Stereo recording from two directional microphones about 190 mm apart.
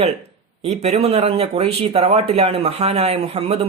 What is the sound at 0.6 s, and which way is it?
Speech, 35° right (ahead or behind).